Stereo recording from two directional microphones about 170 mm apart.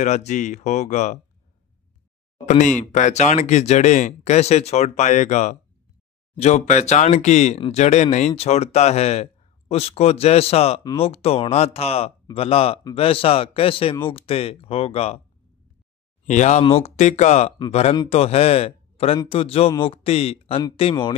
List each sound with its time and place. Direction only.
0.0 s speech: 45° left (ahead or behind)
2.8 s speech: 45° left (ahead or behind)
16.3 s a man's voice: 45° left (ahead or behind)